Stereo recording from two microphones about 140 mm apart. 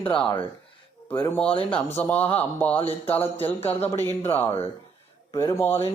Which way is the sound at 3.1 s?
45° left (ahead or behind).